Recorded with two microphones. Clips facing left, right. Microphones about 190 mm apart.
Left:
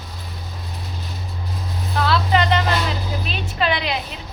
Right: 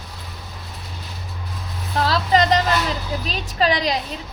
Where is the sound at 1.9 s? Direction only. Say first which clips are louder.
Right 1 dB; 35° right (ahead or behind).